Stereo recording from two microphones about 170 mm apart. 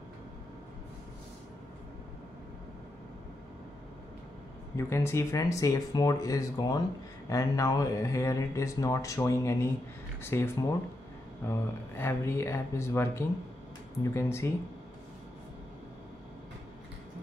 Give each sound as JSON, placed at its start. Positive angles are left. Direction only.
{"t": 4.7, "sound": "speech", "side_deg": 15}